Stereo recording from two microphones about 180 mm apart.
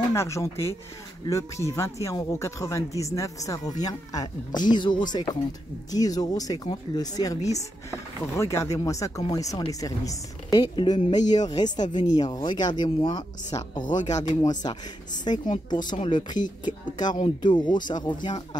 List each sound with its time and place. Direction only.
0.1 s speech: 15° left (ahead or behind)